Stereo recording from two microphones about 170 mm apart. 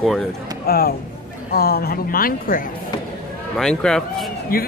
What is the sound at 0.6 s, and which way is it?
A woman's voice, 65° left (ahead or behind).